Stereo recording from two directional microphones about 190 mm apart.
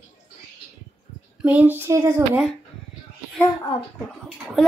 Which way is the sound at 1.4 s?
10° right (ahead or behind).